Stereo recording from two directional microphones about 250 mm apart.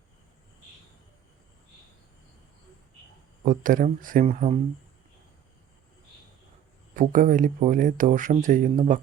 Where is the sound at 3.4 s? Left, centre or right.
Right.